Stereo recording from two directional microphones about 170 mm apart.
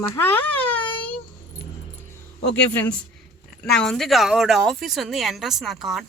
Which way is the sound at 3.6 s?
5° left (ahead or behind).